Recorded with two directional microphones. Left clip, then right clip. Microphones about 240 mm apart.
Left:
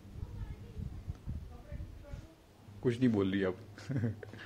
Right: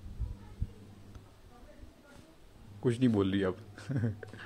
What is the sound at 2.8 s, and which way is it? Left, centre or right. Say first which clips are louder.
Speech: right 2 dB; centre.